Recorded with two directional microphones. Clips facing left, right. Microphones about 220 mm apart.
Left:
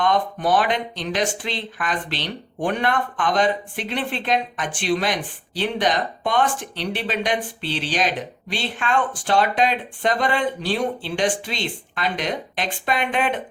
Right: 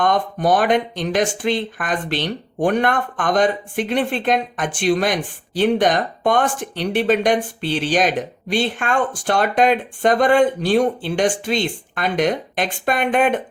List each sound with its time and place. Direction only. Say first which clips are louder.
0.0 s speech: right 2 dB; 45° right (ahead or behind)